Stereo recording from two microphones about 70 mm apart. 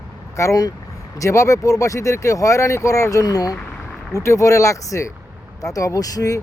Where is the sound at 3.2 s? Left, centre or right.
Left.